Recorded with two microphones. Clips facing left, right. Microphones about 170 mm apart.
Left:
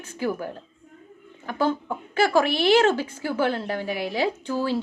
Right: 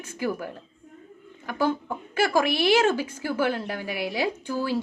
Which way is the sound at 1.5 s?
10° right (ahead or behind).